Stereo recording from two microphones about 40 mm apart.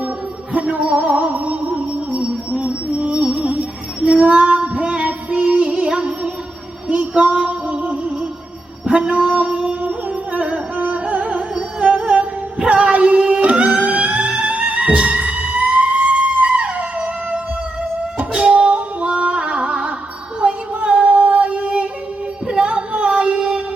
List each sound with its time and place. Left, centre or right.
0.5 s music: right
8.9 s a sound: right
9.8 s music: right
20.4 s female singing: right